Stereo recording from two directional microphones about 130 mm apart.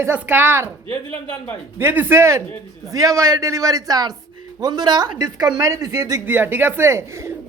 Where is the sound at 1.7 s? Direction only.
15° right (ahead or behind).